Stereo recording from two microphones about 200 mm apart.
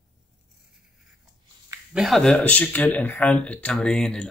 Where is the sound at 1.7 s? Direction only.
Centre (ahead or behind).